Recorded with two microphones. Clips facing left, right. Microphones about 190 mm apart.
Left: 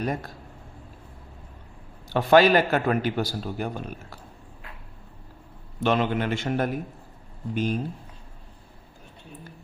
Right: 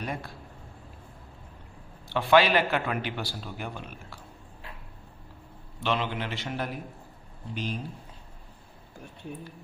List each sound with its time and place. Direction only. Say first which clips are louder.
0.0 s speech: left 6 dB; 45° left (ahead or behind)
2.0 s a man's voice: left 4 dB; 40° left (ahead or behind)
5.8 s a man's voice: left 6 dB; 45° left (ahead or behind)